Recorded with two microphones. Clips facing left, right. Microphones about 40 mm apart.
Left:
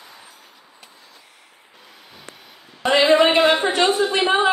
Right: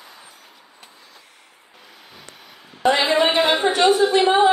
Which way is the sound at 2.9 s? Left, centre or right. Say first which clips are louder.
Left 4 dB; left.